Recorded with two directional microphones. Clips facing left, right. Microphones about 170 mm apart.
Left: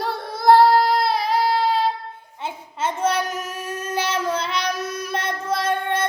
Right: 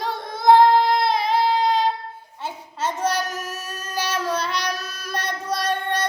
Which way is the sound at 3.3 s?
15° left (ahead or behind).